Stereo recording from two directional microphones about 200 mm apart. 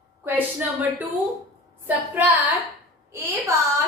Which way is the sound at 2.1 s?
10° right (ahead or behind).